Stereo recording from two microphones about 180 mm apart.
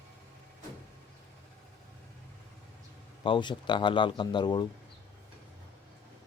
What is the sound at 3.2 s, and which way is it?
Speech, 25° left (ahead or behind).